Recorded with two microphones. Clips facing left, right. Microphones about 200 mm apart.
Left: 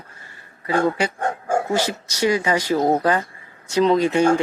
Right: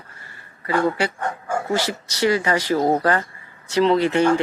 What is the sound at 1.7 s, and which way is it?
Speech, 15° left (ahead or behind).